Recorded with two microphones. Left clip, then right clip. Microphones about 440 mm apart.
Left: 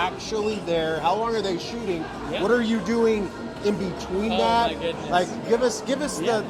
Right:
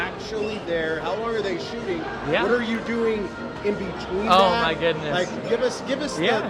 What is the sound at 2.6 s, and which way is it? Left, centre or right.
Speech, left.